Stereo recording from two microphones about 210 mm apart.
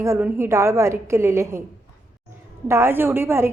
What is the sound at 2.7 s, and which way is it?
Speech, 10° right (ahead or behind).